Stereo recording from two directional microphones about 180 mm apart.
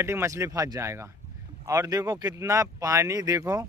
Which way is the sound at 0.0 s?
15° right (ahead or behind).